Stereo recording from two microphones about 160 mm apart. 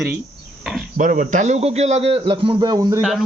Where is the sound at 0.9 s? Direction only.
55° right (ahead or behind); by 3.0 s 25° right (ahead or behind).